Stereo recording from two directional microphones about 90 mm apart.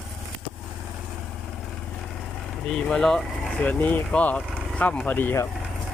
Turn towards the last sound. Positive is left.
turn(degrees=20)  # may be behind; listen again after turning